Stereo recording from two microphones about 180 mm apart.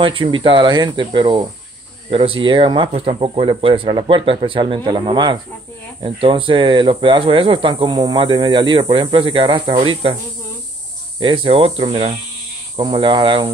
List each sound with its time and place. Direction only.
0.0 s speech: 30° right (ahead or behind)
11.1 s speech: 25° right (ahead or behind)